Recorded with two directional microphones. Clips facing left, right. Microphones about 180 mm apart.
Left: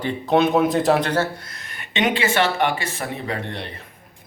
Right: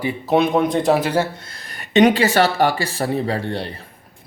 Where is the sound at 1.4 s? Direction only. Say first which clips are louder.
Right 1 dB; 30° right (ahead or behind).